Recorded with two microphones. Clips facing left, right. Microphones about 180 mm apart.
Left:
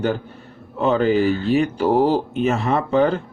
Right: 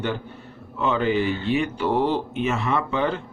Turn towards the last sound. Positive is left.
turn(degrees=40)  # may be behind; listen again after turning